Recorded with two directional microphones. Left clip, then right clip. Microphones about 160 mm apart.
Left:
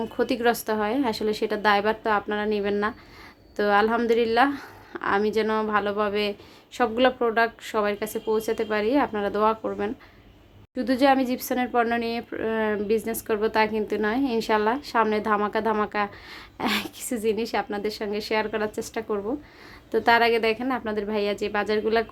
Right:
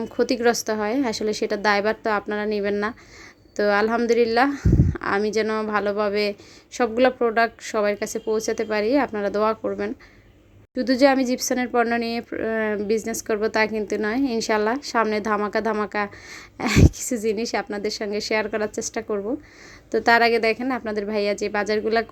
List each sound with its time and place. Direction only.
0.0 s a woman's voice: 20° right (ahead or behind)